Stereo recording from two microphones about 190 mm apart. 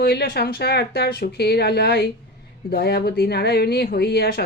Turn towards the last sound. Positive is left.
turn(degrees=55)  # may be behind; listen again after turning